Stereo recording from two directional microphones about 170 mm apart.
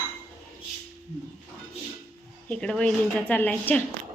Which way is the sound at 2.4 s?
5° left (ahead or behind).